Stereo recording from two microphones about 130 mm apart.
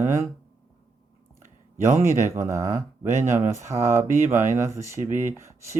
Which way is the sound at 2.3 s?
20° right (ahead or behind).